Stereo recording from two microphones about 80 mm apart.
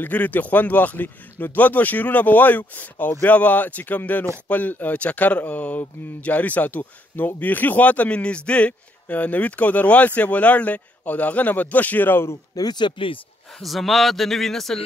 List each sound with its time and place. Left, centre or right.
0.0 s speech: left
12.5 s speech: left
13.6 s speech: centre